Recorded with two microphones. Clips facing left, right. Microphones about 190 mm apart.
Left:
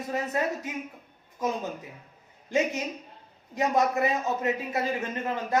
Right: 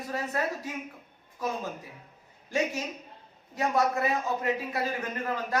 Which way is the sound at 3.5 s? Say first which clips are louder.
Left 2 dB; 20° left (ahead or behind).